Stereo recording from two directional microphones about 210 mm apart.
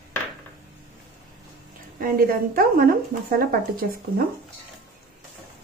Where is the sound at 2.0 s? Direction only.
45° right (ahead or behind).